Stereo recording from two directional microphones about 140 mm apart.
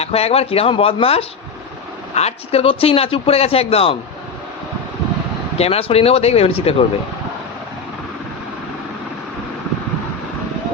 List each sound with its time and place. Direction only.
0.0 s a man's voice: 45° left (ahead or behind)
5.5 s a man's voice: 45° left (ahead or behind)